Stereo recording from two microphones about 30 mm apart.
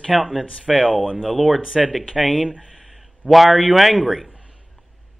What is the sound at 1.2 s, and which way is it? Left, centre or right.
A man's voice, centre.